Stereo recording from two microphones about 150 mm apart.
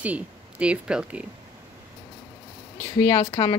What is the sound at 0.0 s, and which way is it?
Speech, 10° right (ahead or behind).